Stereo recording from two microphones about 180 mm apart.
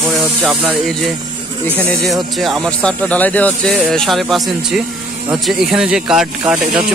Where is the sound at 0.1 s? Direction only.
Centre (ahead or behind).